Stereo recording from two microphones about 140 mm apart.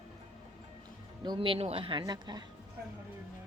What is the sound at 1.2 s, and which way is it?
Speech, 35° right (ahead or behind).